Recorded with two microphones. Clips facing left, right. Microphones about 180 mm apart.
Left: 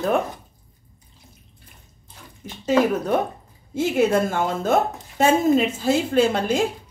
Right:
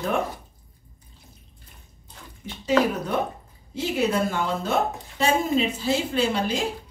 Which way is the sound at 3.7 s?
50° left (ahead or behind).